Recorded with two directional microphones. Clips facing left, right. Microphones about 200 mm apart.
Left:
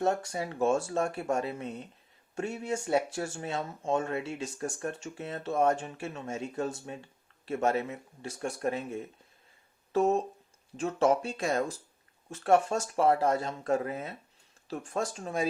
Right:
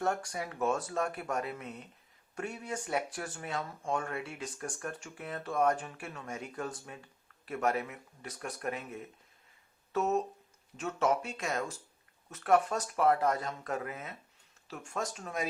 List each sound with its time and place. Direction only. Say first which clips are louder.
0.0 s speech: left 4 dB; 25° left (ahead or behind)